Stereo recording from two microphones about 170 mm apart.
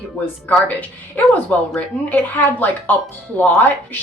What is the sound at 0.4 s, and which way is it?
A woman's voice, 10° left (ahead or behind).